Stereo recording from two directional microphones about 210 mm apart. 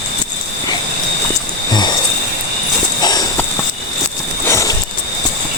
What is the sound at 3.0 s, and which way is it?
Clip-clop, 20° left (ahead or behind).